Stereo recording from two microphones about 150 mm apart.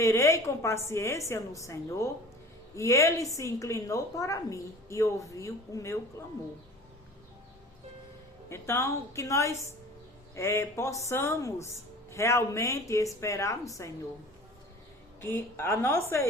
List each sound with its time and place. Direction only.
0.0 s a woman's voice: 20° left (ahead or behind)
8.4 s a woman's voice: 20° left (ahead or behind)
15.2 s a woman's voice: 15° left (ahead or behind)